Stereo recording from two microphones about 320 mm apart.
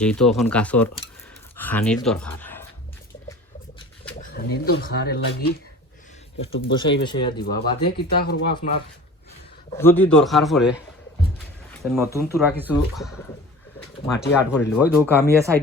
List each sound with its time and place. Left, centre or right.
0.0 s speech: centre
4.2 s speech: left
6.4 s speech: centre
7.9 s speech: left
8.5 s speech: centre
9.7 s speech: centre
11.8 s speech: centre